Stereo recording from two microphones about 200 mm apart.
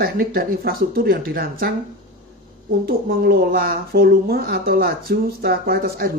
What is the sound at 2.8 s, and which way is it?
Speech, 45° right (ahead or behind).